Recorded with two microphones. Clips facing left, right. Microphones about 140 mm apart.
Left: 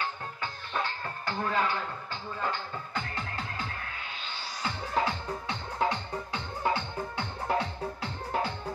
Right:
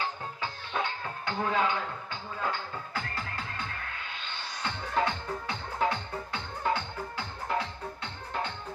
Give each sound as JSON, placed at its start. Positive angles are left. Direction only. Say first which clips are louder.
{"t": 1.0, "sound": "music", "louder": "right 1 dB", "side_deg": -10}
{"t": 4.6, "sound": "music", "louder": "even", "side_deg": 0}
{"t": 7.2, "sound": "music", "louder": "left 2 dB", "side_deg": 30}
{"t": 8.3, "sound": "music", "louder": "left 3 dB", "side_deg": 45}